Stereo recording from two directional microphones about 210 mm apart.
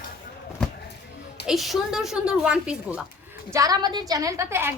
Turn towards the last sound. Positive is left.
turn(degrees=-10)  # may be behind; listen again after turning